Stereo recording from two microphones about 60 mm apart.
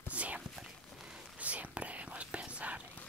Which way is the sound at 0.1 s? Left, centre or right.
Right.